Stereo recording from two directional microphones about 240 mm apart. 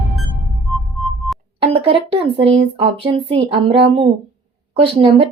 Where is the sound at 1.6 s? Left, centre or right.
Right.